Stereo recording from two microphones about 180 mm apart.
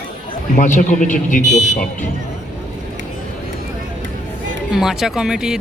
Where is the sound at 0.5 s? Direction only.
45° left (ahead or behind).